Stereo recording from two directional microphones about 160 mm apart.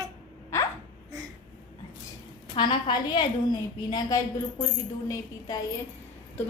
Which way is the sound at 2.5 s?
30° left (ahead or behind).